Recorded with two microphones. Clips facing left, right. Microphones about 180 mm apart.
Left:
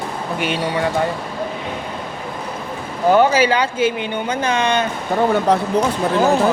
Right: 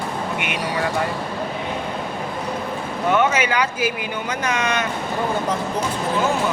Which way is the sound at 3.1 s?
35° left (ahead or behind).